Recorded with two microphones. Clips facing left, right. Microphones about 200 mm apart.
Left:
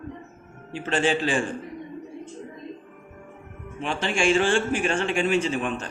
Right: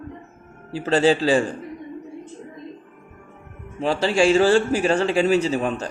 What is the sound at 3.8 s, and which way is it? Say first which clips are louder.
A man's voice: right 6 dB; 35° right (ahead or behind).